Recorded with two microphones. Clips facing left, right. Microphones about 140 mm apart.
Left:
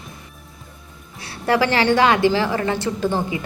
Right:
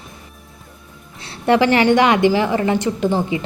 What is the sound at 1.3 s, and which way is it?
A woman's voice, 20° right (ahead or behind).